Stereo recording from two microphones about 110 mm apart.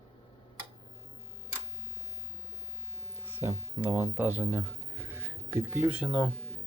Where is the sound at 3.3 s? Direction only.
20° right (ahead or behind).